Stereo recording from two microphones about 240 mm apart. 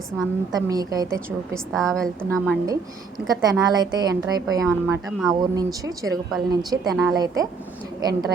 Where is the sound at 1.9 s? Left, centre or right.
Centre.